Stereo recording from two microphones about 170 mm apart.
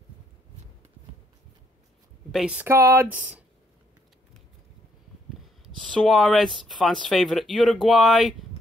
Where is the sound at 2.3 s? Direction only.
5° right (ahead or behind).